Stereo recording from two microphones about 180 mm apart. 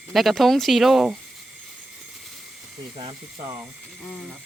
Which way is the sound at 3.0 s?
25° right (ahead or behind).